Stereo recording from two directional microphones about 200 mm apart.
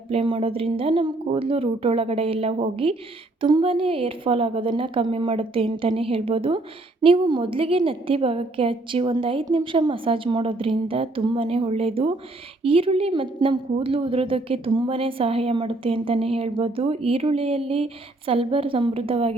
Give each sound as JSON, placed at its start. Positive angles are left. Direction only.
{"t": 0.1, "sound": "a woman's voice", "side_deg": -25}